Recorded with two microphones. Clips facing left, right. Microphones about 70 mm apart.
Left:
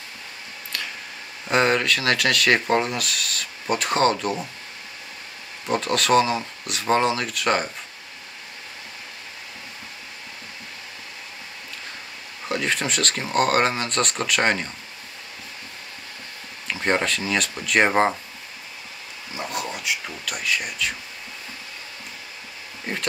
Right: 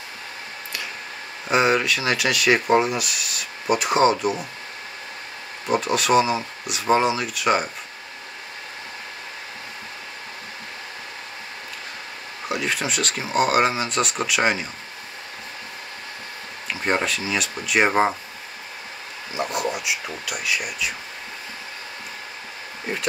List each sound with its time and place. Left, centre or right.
1.5 s speech: centre
5.7 s speech: centre
12.4 s speech: centre
16.8 s speech: centre
19.3 s a sound: centre
20.2 s speech: centre